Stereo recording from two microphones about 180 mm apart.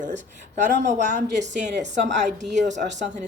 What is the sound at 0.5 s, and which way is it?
A woman's voice, 40° right (ahead or behind).